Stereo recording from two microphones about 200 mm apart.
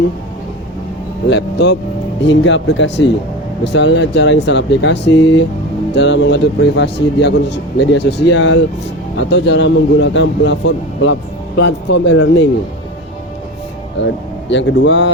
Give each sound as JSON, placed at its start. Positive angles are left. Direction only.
{"t": 1.3, "sound": "a man's voice", "side_deg": 60}
{"t": 2.2, "sound": "a man's voice", "side_deg": 65}
{"t": 14.0, "sound": "a man's voice", "side_deg": 65}